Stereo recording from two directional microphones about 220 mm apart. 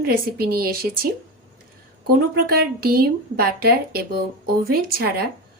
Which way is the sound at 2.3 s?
45° right (ahead or behind).